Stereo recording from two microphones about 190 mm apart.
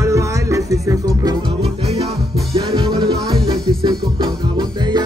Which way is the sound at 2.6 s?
25° right (ahead or behind).